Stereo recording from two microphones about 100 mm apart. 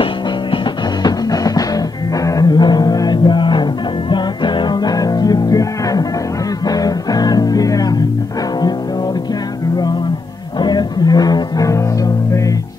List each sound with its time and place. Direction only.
1.0 s music: 40° left (ahead or behind)
10.6 s music: 45° left (ahead or behind)